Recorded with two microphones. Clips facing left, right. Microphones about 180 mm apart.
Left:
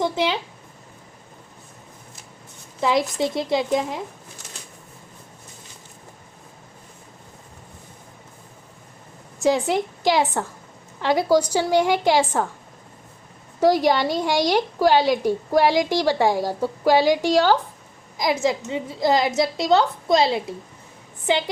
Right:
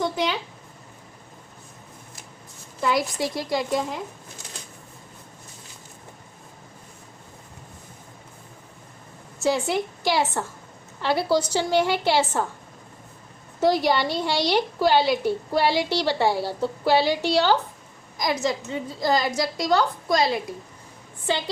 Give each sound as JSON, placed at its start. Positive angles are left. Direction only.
{"t": 0.0, "sound": "a woman's voice", "side_deg": 25}
{"t": 3.2, "sound": "a woman's voice", "side_deg": 25}
{"t": 9.4, "sound": "a woman's voice", "side_deg": 15}
{"t": 13.6, "sound": "a woman's voice", "side_deg": 10}
{"t": 18.4, "sound": "a woman's voice", "side_deg": 20}